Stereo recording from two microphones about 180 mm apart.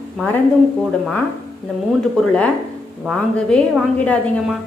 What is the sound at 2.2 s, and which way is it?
A woman's voice, 5° left (ahead or behind).